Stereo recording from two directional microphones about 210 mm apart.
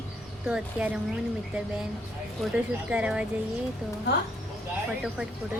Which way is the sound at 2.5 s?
5° right (ahead or behind).